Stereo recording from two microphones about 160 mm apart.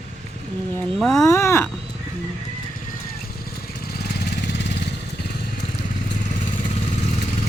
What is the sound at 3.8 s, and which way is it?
Vehicle, 80° left.